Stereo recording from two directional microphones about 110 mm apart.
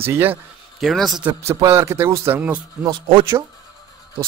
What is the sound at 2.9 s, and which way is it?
Speech, 50° right (ahead or behind).